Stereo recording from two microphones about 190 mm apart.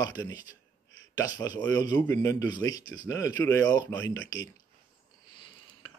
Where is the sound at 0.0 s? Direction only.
20° left (ahead or behind).